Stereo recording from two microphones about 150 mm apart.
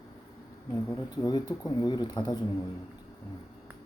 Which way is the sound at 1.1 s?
25° left (ahead or behind).